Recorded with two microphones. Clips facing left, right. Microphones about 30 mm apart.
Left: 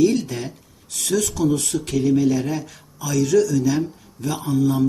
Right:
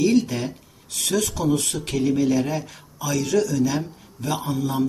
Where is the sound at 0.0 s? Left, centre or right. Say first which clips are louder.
Left 1 dB; centre.